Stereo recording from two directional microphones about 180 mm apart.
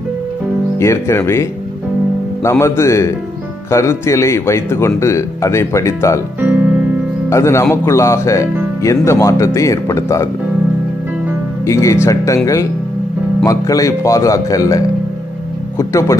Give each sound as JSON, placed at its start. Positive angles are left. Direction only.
{"t": 0.7, "sound": "a man's voice", "side_deg": 15}
{"t": 6.4, "sound": "keyboard", "side_deg": -10}
{"t": 7.2, "sound": "a man's voice", "side_deg": 15}
{"t": 11.6, "sound": "a man's voice", "side_deg": 15}
{"t": 13.4, "sound": "a man's voice", "side_deg": 20}
{"t": 15.8, "sound": "a man's voice", "side_deg": 15}